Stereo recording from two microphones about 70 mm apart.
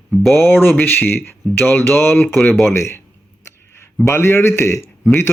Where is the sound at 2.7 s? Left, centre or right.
Left.